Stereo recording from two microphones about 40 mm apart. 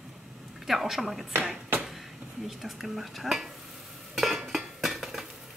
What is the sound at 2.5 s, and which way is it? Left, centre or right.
Speech, centre.